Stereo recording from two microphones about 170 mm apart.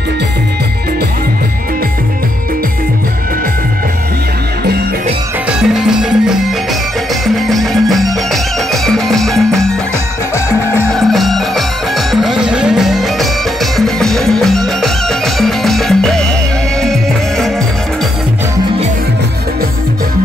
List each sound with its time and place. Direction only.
5.5 s music: 5° right (ahead or behind)
10.3 s music: 15° left (ahead or behind)
10.9 s music: centre (ahead or behind)